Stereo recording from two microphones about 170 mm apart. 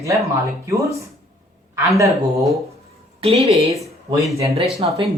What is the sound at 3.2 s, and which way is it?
A woman's voice, 35° right (ahead or behind).